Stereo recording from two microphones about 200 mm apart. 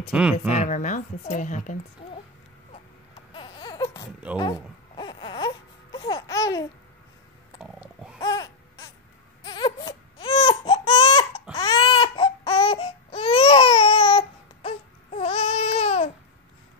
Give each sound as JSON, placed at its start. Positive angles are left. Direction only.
{"t": 0.1, "sound": "speech", "side_deg": -5}
{"t": 0.5, "sound": "a woman's voice", "side_deg": 35}
{"t": 3.3, "sound": "baby cry", "side_deg": 25}
{"t": 8.2, "sound": "baby cry", "side_deg": 15}
{"t": 11.0, "sound": "a sound", "side_deg": 20}
{"t": 11.5, "sound": "baby cry", "side_deg": 25}